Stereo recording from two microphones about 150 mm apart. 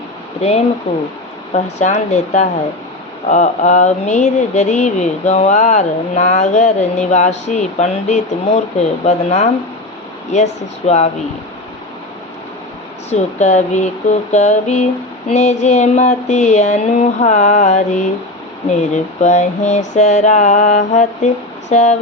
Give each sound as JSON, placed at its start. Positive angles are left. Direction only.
{"t": 1.5, "sound": "mantra", "side_deg": 50}
{"t": 13.1, "sound": "mantra", "side_deg": 50}